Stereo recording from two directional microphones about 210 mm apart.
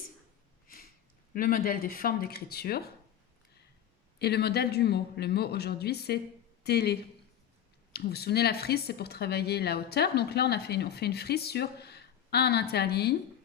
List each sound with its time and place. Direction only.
0.7 s a sound: 45° left (ahead or behind)
1.3 s speech: 40° left (ahead or behind)
4.2 s speech: 50° left (ahead or behind)